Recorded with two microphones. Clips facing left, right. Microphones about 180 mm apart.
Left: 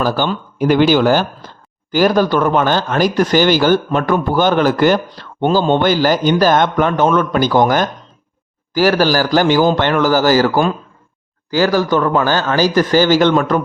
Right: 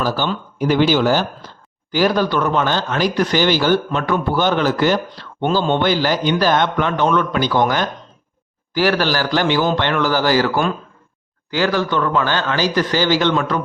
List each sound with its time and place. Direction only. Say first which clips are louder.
0.0 s speech: left 3 dB; 50° left (ahead or behind)